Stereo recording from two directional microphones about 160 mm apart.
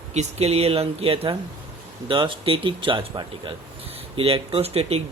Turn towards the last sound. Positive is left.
turn(degrees=-40)  # may be behind; listen again after turning